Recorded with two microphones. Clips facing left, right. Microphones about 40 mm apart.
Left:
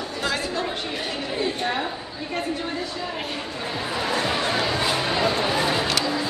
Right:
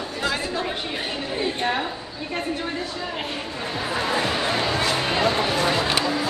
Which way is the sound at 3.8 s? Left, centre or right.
Centre.